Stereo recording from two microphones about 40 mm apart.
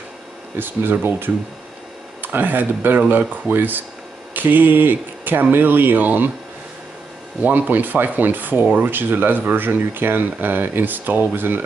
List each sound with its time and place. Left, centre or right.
0.6 s speech: right
2.2 s speech: right
3.1 s rub: right
4.3 s a sound: right
5.5 s rub: right
7.4 s rub: right
8.6 s speech: right
8.9 s speech: right